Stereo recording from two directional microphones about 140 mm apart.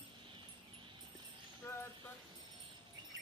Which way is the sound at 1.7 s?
15° left (ahead or behind).